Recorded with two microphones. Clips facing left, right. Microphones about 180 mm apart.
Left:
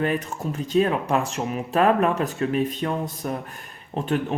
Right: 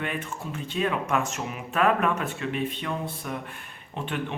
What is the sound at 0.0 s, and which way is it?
Speech, 40° left (ahead or behind).